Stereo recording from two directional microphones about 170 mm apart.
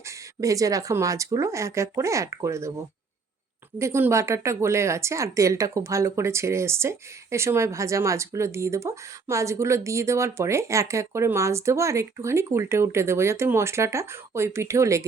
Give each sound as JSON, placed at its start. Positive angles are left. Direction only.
{"t": 0.3, "sound": "speech", "side_deg": -20}
{"t": 3.8, "sound": "speech", "side_deg": -15}